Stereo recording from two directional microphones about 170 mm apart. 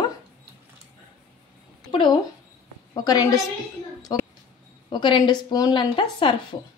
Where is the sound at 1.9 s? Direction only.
30° left (ahead or behind).